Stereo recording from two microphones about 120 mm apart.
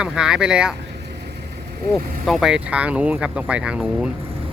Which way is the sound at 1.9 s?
Centre (ahead or behind).